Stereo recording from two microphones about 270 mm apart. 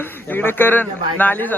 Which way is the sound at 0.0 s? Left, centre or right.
Centre.